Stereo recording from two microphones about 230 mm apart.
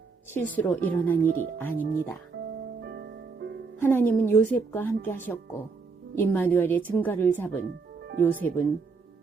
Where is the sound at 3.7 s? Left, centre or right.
Centre.